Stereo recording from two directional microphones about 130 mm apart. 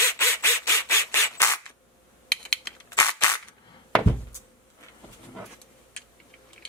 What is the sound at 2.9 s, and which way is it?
Cap gun, 25° left (ahead or behind).